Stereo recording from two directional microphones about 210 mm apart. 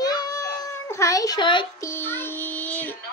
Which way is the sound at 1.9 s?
10° left (ahead or behind).